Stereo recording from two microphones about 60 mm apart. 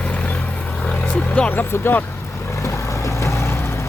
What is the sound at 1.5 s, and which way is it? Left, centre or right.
Vehicle, left.